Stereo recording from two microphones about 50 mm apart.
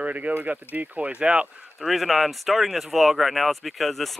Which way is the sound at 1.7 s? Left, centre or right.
Centre.